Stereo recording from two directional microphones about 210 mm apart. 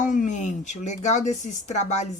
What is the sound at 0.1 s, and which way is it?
Speech, 35° left (ahead or behind).